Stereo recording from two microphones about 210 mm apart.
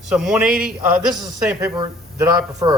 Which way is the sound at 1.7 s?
15° right (ahead or behind).